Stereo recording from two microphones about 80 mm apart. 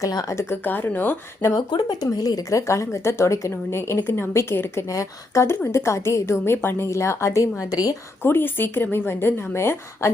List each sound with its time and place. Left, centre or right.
0.0 s speech: left
0.3 s a woman's voice: left
1.5 s speech: left
8.2 s a woman's voice: left